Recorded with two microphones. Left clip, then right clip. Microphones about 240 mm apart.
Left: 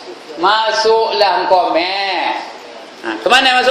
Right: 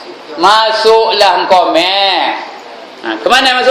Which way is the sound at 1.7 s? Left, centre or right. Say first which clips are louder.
Right 6 dB; centre.